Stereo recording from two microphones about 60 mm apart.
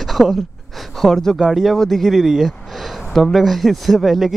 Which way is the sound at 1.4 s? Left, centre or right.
Centre.